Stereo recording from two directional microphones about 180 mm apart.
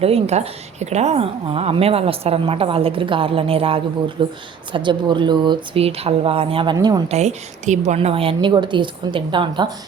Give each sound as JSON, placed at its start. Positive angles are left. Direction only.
{"t": 0.0, "sound": "a woman's voice", "side_deg": -35}
{"t": 6.7, "sound": "a woman's voice", "side_deg": -20}
{"t": 7.1, "sound": "a woman's voice", "side_deg": -40}